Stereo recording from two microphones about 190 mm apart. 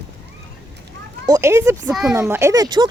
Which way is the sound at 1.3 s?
15° right (ahead or behind).